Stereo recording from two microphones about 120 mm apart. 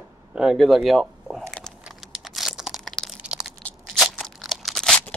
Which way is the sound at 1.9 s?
Centre (ahead or behind).